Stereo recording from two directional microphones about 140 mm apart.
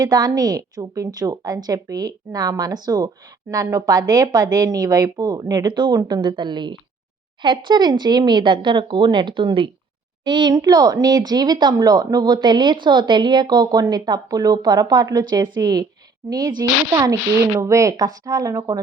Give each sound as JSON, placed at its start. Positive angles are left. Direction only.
{"t": 0.0, "sound": "speech", "side_deg": -30}